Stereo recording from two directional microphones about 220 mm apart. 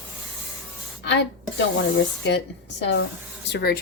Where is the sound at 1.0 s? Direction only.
55° left (ahead or behind).